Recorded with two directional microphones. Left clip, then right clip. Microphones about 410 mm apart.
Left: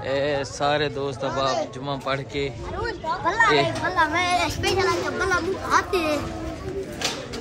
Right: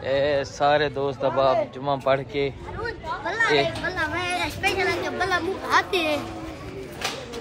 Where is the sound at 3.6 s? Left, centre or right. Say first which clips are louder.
Left 4 dB; left.